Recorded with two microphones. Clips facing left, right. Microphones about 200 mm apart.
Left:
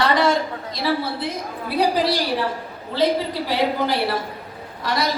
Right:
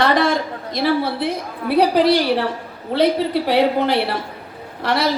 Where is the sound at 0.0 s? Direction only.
60° right (ahead or behind).